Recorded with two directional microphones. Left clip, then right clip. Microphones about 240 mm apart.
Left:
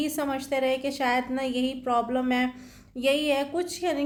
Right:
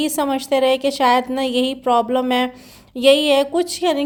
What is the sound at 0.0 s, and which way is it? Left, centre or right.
A woman's voice, right.